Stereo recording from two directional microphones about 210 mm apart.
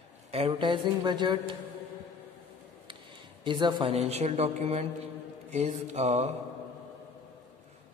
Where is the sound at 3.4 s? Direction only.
20° right (ahead or behind).